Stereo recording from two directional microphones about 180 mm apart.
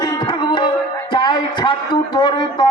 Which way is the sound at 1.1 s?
25° left (ahead or behind).